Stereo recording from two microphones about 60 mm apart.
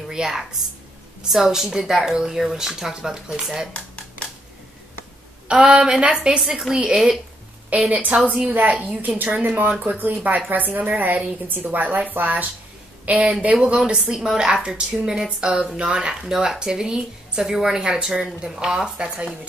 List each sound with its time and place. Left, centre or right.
0.1 s a woman's voice: centre
3.7 s a sound: left
5.5 s a woman's voice: centre